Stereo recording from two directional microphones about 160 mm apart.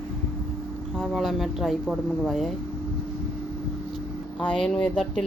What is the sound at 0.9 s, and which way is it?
Speech, centre (ahead or behind).